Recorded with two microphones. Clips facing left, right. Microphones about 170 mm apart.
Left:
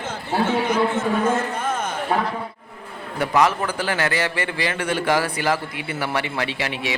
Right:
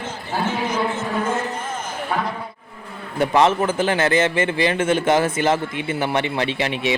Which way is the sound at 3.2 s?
25° right (ahead or behind).